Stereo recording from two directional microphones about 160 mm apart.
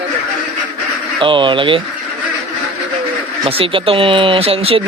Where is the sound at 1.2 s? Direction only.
30° right (ahead or behind).